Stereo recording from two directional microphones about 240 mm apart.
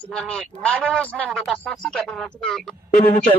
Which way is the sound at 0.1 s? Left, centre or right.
Centre.